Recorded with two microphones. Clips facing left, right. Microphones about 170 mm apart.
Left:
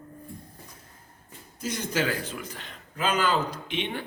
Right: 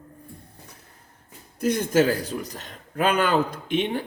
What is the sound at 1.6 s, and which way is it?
A man's voice, 55° right (ahead or behind).